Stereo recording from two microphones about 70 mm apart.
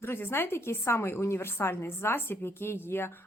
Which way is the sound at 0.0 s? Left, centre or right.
Left.